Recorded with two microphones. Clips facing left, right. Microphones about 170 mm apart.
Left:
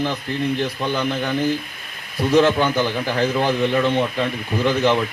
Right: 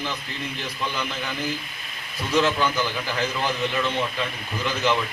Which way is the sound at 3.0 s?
45° left (ahead or behind).